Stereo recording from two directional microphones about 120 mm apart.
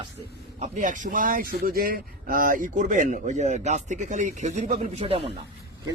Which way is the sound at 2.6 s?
90° right.